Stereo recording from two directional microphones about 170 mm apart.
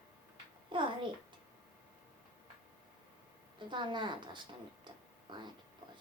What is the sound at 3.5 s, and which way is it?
Speech, 25° right (ahead or behind).